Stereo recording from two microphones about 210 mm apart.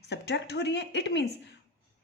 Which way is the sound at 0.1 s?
55° left (ahead or behind).